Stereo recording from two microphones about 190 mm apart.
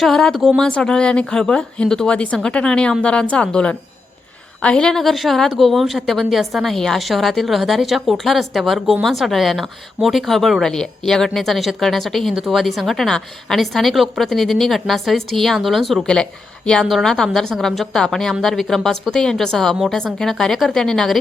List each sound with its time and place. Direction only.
0.0 s a woman's voice: centre (ahead or behind)